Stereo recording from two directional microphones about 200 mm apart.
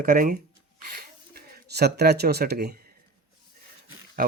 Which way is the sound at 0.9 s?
50° right (ahead or behind).